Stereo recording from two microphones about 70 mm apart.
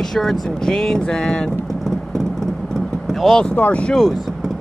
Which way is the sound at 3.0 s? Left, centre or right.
Centre.